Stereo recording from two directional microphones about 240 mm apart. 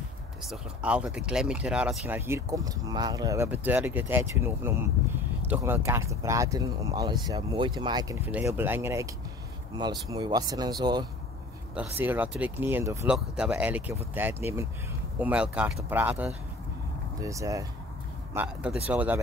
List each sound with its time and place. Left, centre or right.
0.5 s speech: centre
11.7 s speech: centre